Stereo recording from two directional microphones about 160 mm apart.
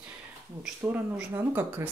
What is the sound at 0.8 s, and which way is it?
Speech, 15° right (ahead or behind).